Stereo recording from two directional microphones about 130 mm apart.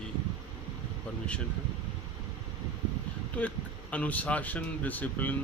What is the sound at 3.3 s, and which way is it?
Speech, 10° left (ahead or behind).